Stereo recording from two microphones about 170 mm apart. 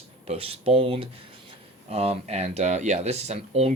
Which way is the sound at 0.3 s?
35° right (ahead or behind).